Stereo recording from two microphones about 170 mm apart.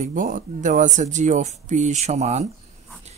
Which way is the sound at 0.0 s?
50° right (ahead or behind).